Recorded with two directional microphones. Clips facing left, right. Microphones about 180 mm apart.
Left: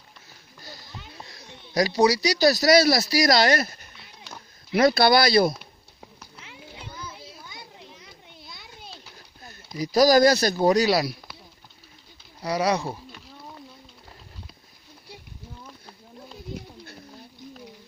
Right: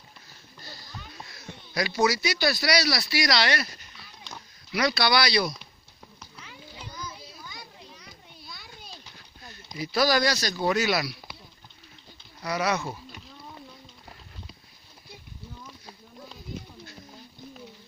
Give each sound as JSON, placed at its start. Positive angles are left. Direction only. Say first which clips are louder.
{"t": 0.6, "sound": "a sound", "louder": "left 1 dB", "side_deg": 15}
{"t": 1.8, "sound": "speech", "louder": "left 5 dB", "side_deg": 35}
{"t": 6.4, "sound": "children playing", "louder": "left 2 dB", "side_deg": 25}
{"t": 9.8, "sound": "speech", "louder": "left 7 dB", "side_deg": 40}
{"t": 10.7, "sound": "speech", "louder": "left 3 dB", "side_deg": 35}
{"t": 12.4, "sound": "speech", "louder": "left 4 dB", "side_deg": 35}